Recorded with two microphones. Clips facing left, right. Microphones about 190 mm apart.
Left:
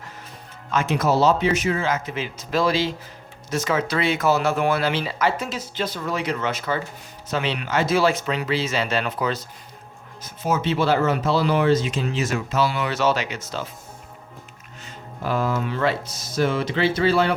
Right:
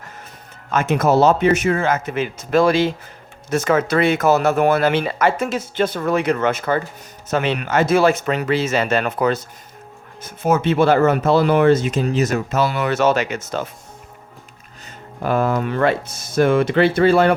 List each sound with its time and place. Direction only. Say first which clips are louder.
0.7 s speech: right 4 dB; 50° right (ahead or behind)
14.8 s speech: right 5 dB; 55° right (ahead or behind)